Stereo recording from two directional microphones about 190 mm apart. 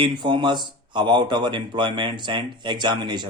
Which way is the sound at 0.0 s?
25° right (ahead or behind).